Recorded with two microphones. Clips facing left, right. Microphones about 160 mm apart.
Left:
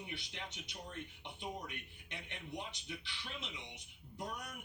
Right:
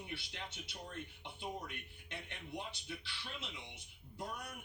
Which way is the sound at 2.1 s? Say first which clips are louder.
Even; 15° left (ahead or behind).